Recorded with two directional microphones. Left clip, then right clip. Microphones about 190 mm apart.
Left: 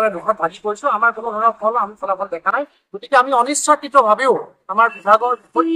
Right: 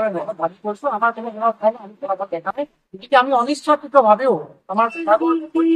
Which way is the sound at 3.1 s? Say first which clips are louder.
Left 1 dB; 10° left (ahead or behind).